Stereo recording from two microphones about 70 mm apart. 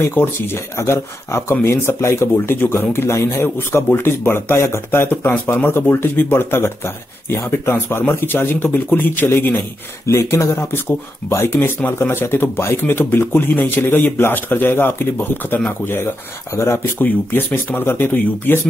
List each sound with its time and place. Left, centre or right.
0.0 s speech: left
10.0 s speech: left